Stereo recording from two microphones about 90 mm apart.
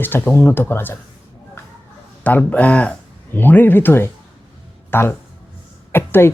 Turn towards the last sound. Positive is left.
turn(degrees=25)  # may be behind; listen again after turning